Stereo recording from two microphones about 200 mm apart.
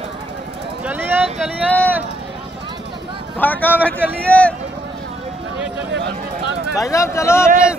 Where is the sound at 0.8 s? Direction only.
10° right (ahead or behind).